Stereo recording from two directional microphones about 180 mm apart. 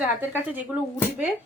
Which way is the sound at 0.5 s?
10° right (ahead or behind).